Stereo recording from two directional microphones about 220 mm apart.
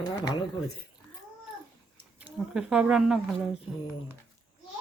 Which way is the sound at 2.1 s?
5° right (ahead or behind).